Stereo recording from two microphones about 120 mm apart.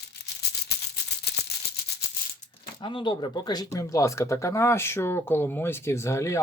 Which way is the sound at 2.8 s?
40° left (ahead or behind).